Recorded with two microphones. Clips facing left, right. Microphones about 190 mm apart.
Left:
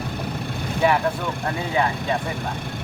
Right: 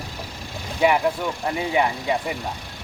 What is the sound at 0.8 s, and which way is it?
Speech, 15° right (ahead or behind).